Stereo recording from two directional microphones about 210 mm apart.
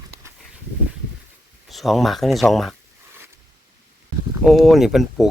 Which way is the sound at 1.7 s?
Centre (ahead or behind).